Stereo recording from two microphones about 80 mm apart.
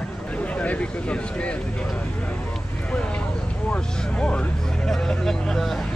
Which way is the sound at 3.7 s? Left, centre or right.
Centre.